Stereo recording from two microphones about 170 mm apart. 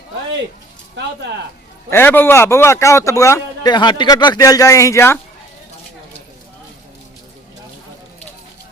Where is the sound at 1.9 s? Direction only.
15° left (ahead or behind).